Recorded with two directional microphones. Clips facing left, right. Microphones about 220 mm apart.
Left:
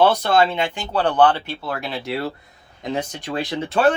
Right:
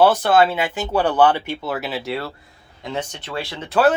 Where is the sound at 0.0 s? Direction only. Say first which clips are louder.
Right 2 dB; 5° right (ahead or behind).